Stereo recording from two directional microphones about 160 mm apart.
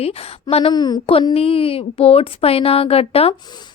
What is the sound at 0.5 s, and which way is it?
Speech, 30° left (ahead or behind).